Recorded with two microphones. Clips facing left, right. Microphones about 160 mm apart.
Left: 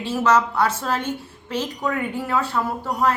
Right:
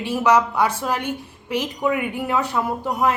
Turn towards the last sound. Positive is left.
turn(degrees=-20)  # may be behind; listen again after turning